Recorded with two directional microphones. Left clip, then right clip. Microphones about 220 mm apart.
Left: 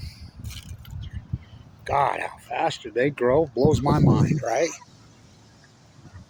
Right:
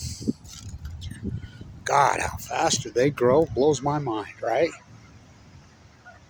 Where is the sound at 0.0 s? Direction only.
40° right (ahead or behind).